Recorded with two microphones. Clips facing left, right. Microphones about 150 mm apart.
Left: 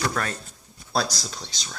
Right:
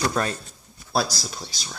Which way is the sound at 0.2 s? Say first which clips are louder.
Right 4 dB; 25° right (ahead or behind).